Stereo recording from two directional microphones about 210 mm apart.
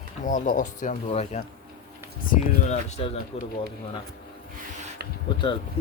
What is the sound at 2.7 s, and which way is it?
Speech, 30° left (ahead or behind).